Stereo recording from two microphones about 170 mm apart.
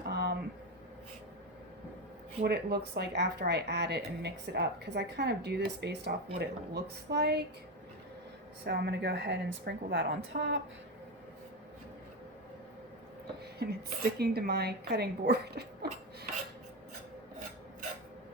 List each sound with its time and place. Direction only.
0.1 s a sound: 70° right (ahead or behind)
2.4 s a woman's voice: 70° right (ahead or behind)
8.6 s a woman's voice: 75° right (ahead or behind)
13.6 s a woman's voice: 70° right (ahead or behind)